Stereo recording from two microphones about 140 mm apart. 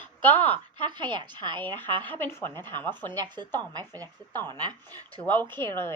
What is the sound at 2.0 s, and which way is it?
A woman's voice, 15° left (ahead or behind).